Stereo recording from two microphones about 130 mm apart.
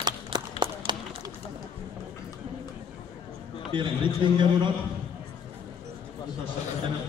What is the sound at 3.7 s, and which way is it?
Speech, 40° right (ahead or behind).